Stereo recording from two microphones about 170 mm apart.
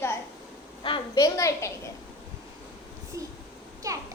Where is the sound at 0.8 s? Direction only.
25° left (ahead or behind).